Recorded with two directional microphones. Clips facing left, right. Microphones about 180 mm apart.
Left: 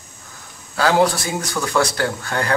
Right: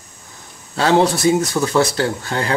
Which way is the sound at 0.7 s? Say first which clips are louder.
Right 2 dB; 25° right (ahead or behind).